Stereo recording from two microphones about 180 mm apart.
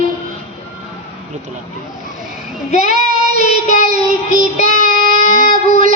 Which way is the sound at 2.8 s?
50° right (ahead or behind).